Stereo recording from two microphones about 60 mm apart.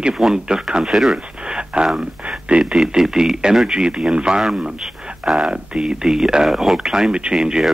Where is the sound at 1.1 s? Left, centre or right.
Centre.